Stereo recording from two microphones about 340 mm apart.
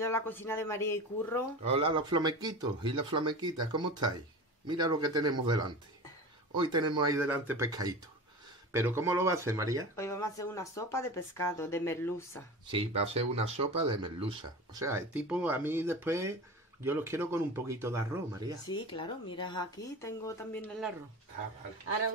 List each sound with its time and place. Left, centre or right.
0.0 s speech: centre
1.6 s speech: centre
9.9 s speech: centre
12.7 s speech: centre
18.7 s speech: centre